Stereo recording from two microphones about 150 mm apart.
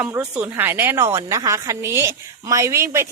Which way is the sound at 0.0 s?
10° right (ahead or behind).